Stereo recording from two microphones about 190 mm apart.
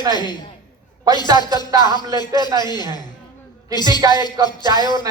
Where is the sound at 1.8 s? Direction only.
20° left (ahead or behind).